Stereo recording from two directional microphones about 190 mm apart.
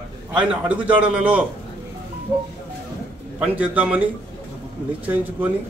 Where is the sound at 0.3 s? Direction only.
5° right (ahead or behind).